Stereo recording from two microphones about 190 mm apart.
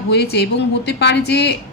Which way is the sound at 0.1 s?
60° left (ahead or behind).